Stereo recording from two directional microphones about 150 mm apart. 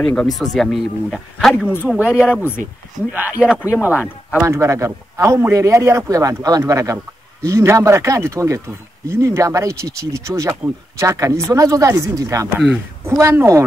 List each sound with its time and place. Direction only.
0.0 s speech: 10° left (ahead or behind); by 13.7 s 20° right (ahead or behind)